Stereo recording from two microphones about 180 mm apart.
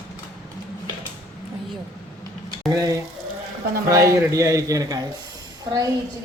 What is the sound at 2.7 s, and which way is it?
A man's voice, 20° right (ahead or behind).